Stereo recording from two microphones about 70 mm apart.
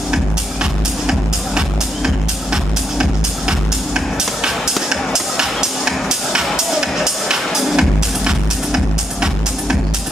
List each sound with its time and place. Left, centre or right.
2.0 s music: centre